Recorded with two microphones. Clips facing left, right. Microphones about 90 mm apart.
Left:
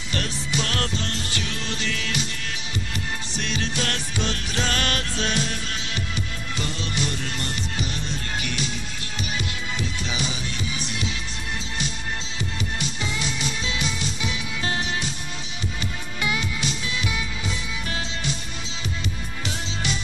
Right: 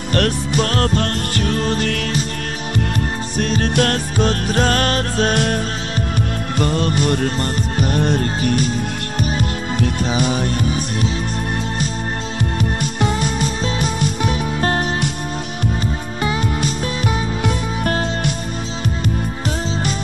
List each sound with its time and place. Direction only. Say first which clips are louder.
0.1 s music: right 10 dB; 50° right (ahead or behind)
3.3 s music: right 11 dB; 45° right (ahead or behind)
6.6 s music: right 11 dB; 50° right (ahead or behind)
12.5 s music: right 9 dB; 50° right (ahead or behind)
16.2 s music: right 6 dB; 40° right (ahead or behind)